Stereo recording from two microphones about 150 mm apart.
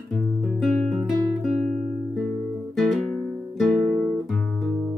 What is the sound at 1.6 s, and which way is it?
Guitar, 50° right (ahead or behind).